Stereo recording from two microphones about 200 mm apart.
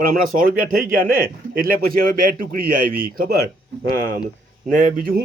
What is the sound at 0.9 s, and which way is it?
Speech, 45° right (ahead or behind).